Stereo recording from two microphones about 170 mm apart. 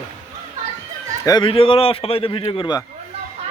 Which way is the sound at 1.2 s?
25° left (ahead or behind).